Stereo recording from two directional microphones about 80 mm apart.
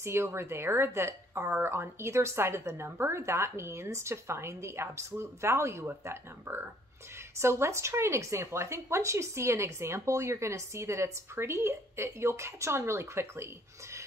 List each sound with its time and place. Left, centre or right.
0.0 s speech: right